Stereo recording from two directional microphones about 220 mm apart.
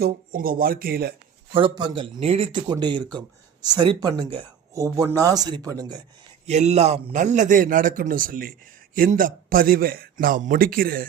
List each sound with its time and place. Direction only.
0.0 s speech: 40° right (ahead or behind)
1.5 s speech: 20° right (ahead or behind)
6.4 s speech: 30° right (ahead or behind)